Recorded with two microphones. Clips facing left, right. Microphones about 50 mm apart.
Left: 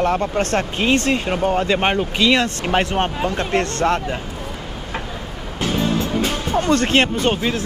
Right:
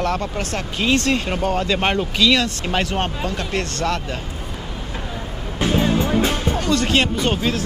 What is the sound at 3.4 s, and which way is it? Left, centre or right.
Speech, left.